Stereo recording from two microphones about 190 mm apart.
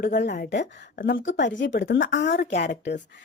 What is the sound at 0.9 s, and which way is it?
Speech, 50° left (ahead or behind).